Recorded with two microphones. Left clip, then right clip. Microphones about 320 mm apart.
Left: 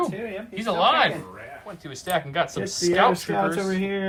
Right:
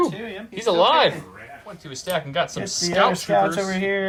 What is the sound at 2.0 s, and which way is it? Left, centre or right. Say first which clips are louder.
Speech: right 1 dB; centre.